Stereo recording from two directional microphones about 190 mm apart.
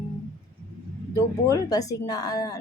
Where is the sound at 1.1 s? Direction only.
20° left (ahead or behind).